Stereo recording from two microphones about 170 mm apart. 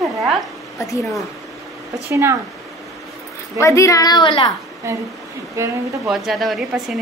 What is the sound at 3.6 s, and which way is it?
Speech, 20° left (ahead or behind).